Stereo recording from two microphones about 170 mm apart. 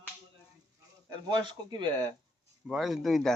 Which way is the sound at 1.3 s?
25° right (ahead or behind).